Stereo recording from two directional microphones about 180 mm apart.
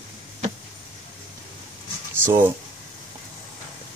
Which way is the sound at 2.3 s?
10° right (ahead or behind).